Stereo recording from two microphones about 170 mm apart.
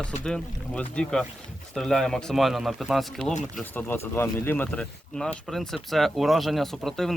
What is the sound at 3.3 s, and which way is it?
Speech, 45° left (ahead or behind).